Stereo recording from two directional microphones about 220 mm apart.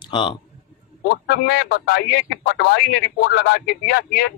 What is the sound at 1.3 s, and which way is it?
A man's voice, 50° left (ahead or behind).